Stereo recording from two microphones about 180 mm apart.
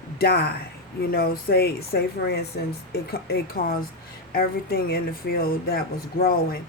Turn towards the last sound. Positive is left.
turn(degrees=55)  # may be behind; listen again after turning